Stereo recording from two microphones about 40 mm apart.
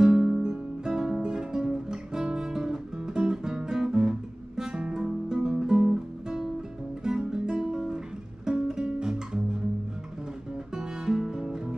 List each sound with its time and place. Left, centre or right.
0.0 s music: centre
0.8 s guitar: centre
8.7 s music: centre
10.7 s music: centre